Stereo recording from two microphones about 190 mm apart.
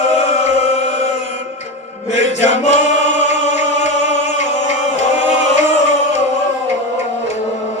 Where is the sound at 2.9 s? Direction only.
75° right (ahead or behind).